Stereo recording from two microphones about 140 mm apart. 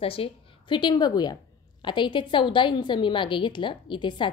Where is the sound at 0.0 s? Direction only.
40° left (ahead or behind).